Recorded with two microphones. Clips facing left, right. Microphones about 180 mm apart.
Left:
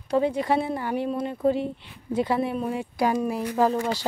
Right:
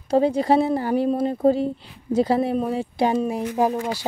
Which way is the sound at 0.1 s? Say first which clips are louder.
Right 5 dB; 35° right (ahead or behind).